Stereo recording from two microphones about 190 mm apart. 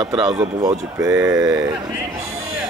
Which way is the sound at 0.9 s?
15° right (ahead or behind).